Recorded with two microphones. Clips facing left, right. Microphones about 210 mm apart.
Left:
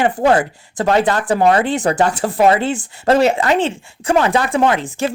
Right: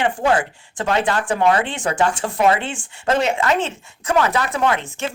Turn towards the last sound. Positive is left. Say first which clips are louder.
# left 5 dB
turn(degrees=35)  # may be behind; listen again after turning